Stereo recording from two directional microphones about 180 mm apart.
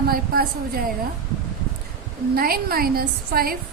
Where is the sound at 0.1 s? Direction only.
55° right (ahead or behind).